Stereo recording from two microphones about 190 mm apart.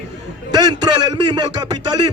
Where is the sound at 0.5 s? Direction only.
20° right (ahead or behind).